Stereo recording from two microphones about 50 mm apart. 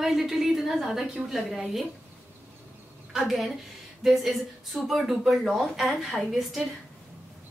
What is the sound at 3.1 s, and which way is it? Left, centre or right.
A woman's voice, centre.